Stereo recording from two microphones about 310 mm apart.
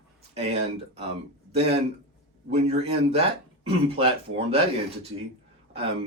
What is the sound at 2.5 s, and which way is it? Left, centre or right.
A man's voice, centre.